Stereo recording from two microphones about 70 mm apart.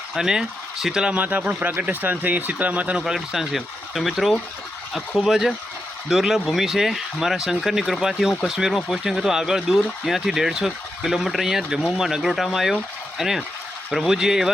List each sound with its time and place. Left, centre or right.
0.1 s speech: centre
1.1 s speech: right
3.0 s speech: centre